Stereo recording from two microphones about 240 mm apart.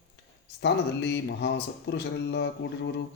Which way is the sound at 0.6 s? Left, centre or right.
Left.